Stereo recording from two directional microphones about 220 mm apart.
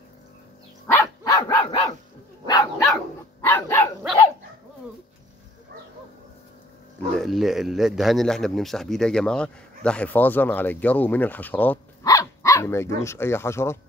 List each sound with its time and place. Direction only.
0.9 s dog: 15° left (ahead or behind)
7.2 s a man's voice: centre (ahead or behind)